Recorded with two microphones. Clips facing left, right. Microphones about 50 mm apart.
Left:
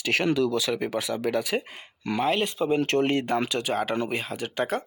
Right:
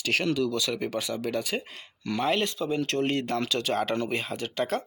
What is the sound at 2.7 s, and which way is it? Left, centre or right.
Speech, left.